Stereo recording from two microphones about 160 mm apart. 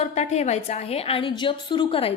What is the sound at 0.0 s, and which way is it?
A woman's voice, 45° left (ahead or behind).